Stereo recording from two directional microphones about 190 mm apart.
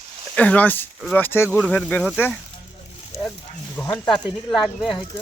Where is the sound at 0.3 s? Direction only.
5° left (ahead or behind).